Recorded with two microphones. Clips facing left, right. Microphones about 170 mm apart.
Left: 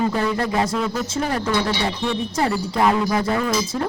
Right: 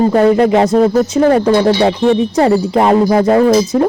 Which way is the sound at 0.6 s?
40° right (ahead or behind).